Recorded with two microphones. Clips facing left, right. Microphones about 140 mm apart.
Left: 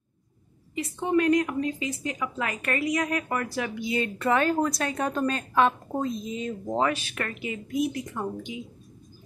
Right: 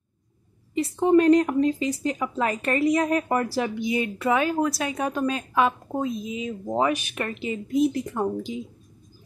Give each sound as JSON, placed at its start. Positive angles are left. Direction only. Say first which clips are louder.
{"t": 0.7, "sound": "a woman's voice", "louder": "right 6 dB", "side_deg": -35}
{"t": 3.8, "sound": "a woman's voice", "louder": "right 2 dB", "side_deg": -15}